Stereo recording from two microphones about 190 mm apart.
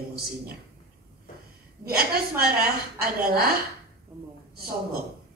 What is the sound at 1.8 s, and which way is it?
A woman's voice, 55° right (ahead or behind).